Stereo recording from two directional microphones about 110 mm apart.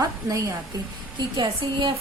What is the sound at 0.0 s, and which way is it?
Speech, 30° right (ahead or behind).